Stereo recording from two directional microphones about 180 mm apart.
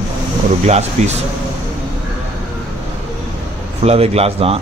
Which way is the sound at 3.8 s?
35° right (ahead or behind).